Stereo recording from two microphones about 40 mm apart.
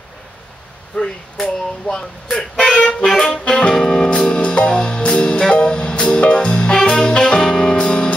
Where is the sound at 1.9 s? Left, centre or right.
Centre.